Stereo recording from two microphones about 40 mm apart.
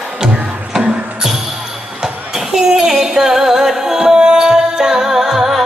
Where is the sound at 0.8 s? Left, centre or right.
Right.